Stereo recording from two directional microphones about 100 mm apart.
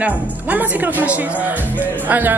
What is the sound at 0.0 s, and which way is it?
Speech, 15° right (ahead or behind).